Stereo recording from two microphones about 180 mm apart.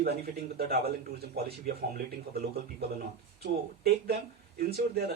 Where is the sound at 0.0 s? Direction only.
60° right (ahead or behind).